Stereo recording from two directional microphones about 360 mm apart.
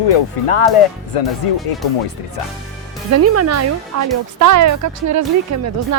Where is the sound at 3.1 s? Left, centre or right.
Right.